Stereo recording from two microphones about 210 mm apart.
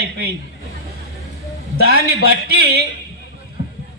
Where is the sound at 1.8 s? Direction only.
45° right (ahead or behind).